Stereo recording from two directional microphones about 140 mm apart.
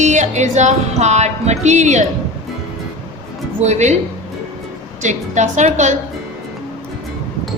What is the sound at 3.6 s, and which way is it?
Speech, 55° right (ahead or behind).